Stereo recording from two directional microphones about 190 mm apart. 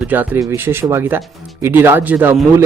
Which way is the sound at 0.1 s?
10° right (ahead or behind).